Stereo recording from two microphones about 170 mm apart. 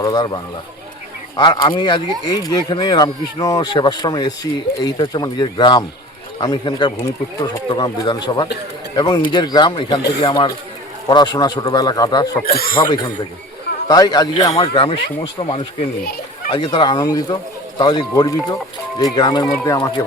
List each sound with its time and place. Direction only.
0.0 s speech: 25° left (ahead or behind)
1.4 s speech: 25° left (ahead or behind)
12.5 s speech: 60° left (ahead or behind)
12.8 s speech: 25° left (ahead or behind)